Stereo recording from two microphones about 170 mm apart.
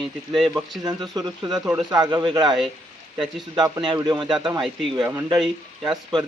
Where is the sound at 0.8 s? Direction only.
25° right (ahead or behind).